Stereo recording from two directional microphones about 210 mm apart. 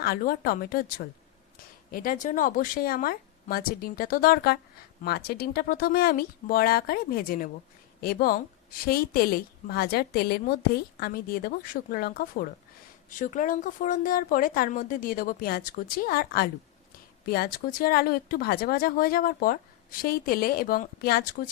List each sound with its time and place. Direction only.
0.0 s speech: 45° left (ahead or behind)